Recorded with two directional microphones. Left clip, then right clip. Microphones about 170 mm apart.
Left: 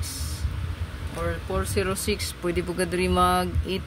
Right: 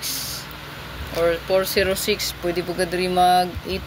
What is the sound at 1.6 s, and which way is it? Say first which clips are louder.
Speech: right 7 dB; 50° left (ahead or behind).